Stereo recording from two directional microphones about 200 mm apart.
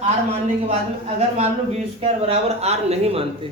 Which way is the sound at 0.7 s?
30° right (ahead or behind).